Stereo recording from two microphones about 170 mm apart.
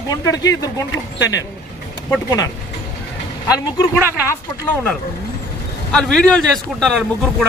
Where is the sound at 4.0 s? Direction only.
15° right (ahead or behind).